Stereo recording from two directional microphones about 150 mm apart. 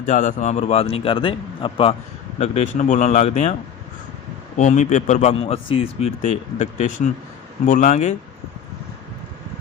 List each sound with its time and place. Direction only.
0.0 s a man's voice: 55° left (ahead or behind); by 2.0 s 40° left (ahead or behind)
2.4 s a man's voice: 50° left (ahead or behind)
4.5 s a man's voice: 55° left (ahead or behind)